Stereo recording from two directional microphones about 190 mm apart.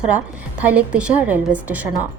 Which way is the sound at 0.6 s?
5° right (ahead or behind).